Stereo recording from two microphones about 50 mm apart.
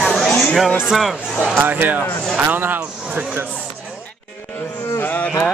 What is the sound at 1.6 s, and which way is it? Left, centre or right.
Speech, right.